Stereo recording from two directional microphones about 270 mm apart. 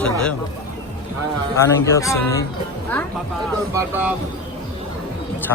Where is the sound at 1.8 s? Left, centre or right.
Centre.